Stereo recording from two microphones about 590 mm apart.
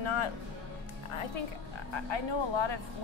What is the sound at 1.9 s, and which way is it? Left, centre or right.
Speech, left.